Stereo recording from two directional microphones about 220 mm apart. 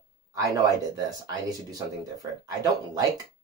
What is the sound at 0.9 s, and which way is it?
Speech, 15° right (ahead or behind).